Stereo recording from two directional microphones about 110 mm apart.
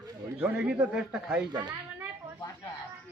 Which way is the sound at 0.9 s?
5° right (ahead or behind).